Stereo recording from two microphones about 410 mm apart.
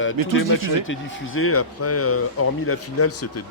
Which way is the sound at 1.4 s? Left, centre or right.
Left.